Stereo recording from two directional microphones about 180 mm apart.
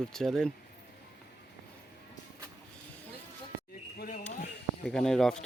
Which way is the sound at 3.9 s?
50° left (ahead or behind).